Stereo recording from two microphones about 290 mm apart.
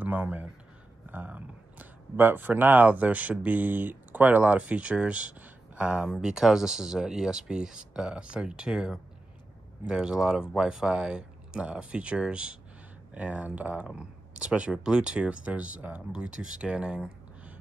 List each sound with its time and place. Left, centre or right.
0.0 s speech: centre